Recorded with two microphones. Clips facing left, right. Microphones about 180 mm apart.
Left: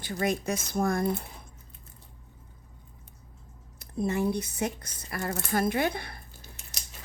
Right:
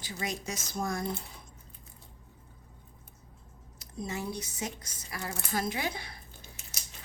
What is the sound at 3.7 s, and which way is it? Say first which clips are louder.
A woman's voice: left 8 dB; 55° left (ahead or behind).